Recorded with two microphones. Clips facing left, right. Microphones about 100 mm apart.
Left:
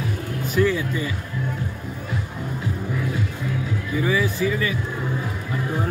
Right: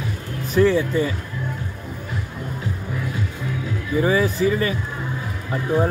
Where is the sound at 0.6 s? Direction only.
35° right (ahead or behind).